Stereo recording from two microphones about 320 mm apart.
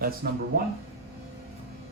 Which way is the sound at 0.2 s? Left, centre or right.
Right.